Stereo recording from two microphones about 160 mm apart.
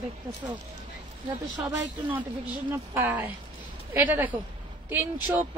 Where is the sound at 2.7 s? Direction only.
15° right (ahead or behind).